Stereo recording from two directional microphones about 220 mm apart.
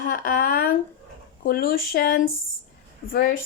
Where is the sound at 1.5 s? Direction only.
40° left (ahead or behind).